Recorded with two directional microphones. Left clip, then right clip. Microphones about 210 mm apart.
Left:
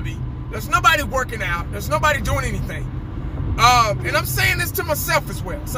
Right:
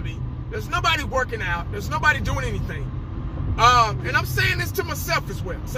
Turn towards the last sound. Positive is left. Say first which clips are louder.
# left 4 dB
turn(degrees=15)  # may be behind; listen again after turning